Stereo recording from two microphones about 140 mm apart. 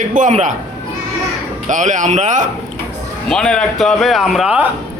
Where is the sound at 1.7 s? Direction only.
60° right (ahead or behind).